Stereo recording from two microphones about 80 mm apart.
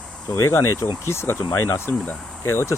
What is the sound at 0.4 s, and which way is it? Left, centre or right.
Speech, left.